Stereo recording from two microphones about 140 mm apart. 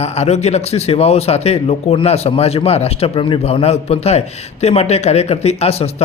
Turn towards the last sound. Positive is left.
turn(degrees=45)  # may be behind; listen again after turning